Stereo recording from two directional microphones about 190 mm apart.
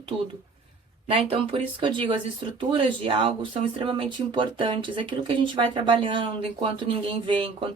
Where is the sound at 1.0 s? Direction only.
30° right (ahead or behind).